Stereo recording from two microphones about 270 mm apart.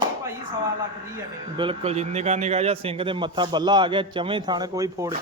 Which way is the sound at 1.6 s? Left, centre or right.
Right.